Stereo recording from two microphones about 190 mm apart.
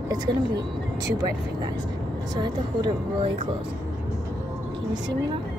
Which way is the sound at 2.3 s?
20° right (ahead or behind).